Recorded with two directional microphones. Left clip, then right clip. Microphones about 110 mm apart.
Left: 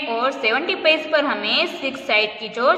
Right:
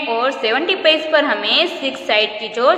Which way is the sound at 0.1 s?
30° left (ahead or behind).